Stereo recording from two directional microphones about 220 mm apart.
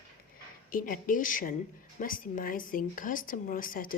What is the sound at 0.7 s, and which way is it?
Speech, 40° left (ahead or behind).